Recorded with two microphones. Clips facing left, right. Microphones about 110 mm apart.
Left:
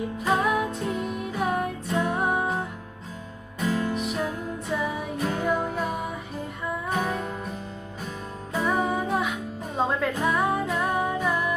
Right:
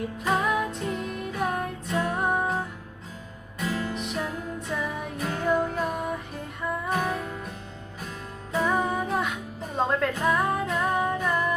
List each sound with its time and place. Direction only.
0.3 s music: centre (ahead or behind)
3.7 s music: 15° left (ahead or behind)
3.9 s music: centre (ahead or behind)
8.5 s music: centre (ahead or behind)